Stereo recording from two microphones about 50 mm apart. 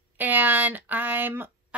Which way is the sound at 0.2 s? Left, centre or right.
Right.